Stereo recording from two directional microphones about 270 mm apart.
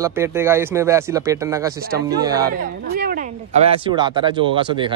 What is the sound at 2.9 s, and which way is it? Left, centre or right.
Speech, right.